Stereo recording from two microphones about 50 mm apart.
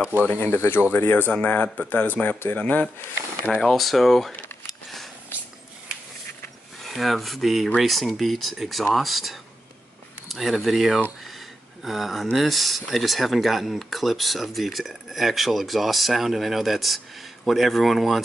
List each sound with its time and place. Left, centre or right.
0.2 s speech: left
0.6 s speech: left
1.4 s speech: left
3.6 s speech: centre
4.6 s a sound: centre
6.8 s speech: centre
11.2 s a sound: centre
12.4 s speech: centre